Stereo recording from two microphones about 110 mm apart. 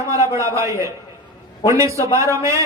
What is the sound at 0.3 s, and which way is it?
A man's voice, 25° right (ahead or behind).